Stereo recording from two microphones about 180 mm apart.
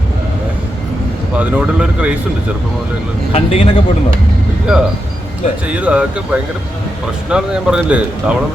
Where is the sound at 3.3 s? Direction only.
35° left (ahead or behind).